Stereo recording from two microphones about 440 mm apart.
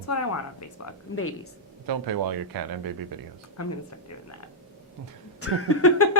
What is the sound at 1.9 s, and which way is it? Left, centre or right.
Speech, right.